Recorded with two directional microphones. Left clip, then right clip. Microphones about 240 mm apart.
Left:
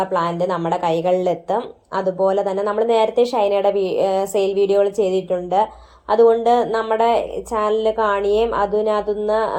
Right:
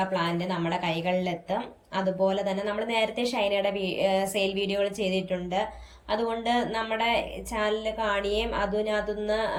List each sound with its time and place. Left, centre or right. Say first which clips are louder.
0.1 s a woman's voice: left 9 dB; centre